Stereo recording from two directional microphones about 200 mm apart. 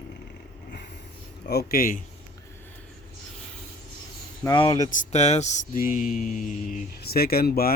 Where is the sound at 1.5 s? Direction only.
50° left (ahead or behind).